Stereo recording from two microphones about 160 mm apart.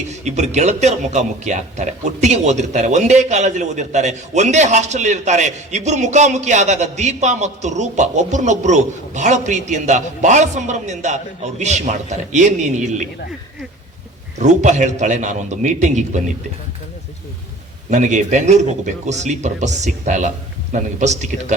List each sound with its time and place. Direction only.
0.1 s a man's voice: 45° right (ahead or behind)
14.3 s a man's voice: 45° right (ahead or behind)
17.9 s a man's voice: 50° right (ahead or behind)